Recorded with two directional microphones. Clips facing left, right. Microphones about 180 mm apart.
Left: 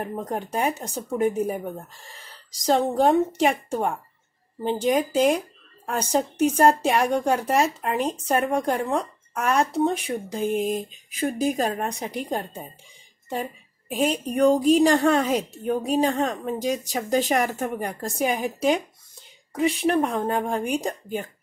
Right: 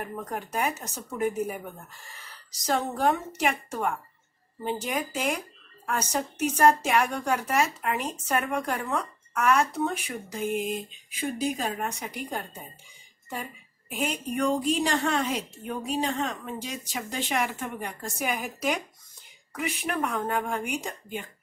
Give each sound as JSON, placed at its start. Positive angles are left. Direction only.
{"t": 0.0, "sound": "a woman's voice", "side_deg": 35}
{"t": 10.8, "sound": "a woman's voice", "side_deg": 45}
{"t": 13.9, "sound": "a woman's voice", "side_deg": 35}